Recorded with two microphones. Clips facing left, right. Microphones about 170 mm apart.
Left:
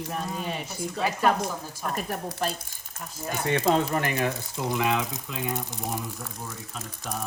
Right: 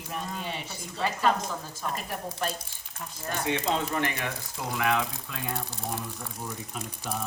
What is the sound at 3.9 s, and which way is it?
Speech, 40° left (ahead or behind).